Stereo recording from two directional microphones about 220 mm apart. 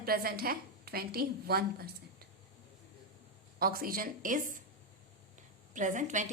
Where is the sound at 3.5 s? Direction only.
40° right (ahead or behind).